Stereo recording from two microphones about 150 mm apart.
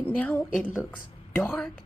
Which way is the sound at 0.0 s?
10° left (ahead or behind).